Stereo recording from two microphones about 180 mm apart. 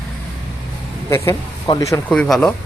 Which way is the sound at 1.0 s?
15° left (ahead or behind).